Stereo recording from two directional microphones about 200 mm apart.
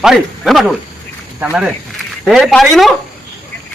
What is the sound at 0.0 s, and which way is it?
Speech, centre (ahead or behind).